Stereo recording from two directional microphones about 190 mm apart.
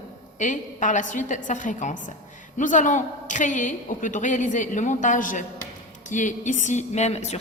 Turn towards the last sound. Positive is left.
turn(degrees=35)  # may be behind; listen again after turning